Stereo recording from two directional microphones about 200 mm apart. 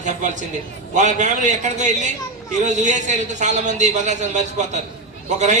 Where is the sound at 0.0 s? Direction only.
40° right (ahead or behind).